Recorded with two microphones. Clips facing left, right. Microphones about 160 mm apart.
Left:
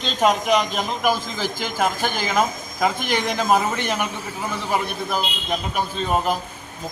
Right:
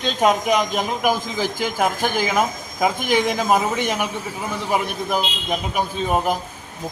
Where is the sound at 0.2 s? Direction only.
10° right (ahead or behind).